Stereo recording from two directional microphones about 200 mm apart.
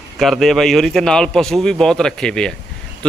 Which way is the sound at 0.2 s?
Centre (ahead or behind).